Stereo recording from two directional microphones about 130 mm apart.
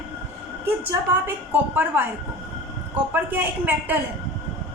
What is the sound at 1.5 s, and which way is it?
Speech, 15° right (ahead or behind).